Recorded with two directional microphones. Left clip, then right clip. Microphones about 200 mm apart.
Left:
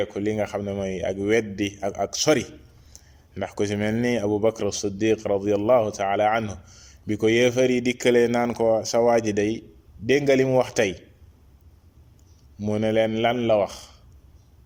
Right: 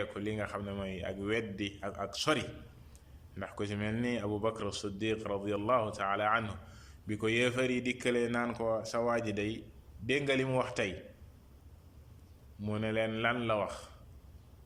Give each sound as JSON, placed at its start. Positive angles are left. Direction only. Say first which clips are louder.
{"t": 0.0, "sound": "a man's voice", "louder": "left 12 dB", "side_deg": 35}
{"t": 12.5, "sound": "a man's voice", "louder": "left 12 dB", "side_deg": 35}